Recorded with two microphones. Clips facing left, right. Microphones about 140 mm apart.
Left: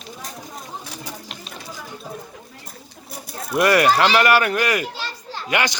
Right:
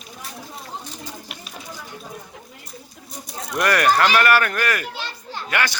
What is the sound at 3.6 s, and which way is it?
A man's voice, 10° left (ahead or behind).